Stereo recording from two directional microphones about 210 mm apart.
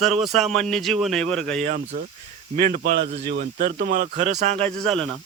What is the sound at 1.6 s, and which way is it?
A man's voice, 35° right (ahead or behind).